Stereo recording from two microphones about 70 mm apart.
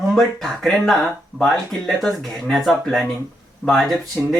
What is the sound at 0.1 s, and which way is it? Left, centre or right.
Speech, centre.